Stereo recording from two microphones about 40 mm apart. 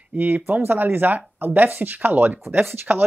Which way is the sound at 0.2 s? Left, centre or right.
Right.